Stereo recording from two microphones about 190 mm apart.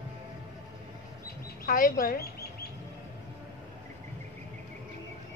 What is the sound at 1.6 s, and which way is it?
Speech, 45° left (ahead or behind).